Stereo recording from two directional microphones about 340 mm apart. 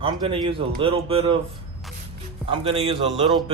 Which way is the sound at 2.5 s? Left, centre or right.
Centre.